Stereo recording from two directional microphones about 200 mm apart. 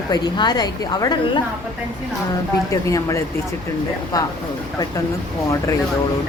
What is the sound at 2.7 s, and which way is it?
A woman's voice, 15° left (ahead or behind).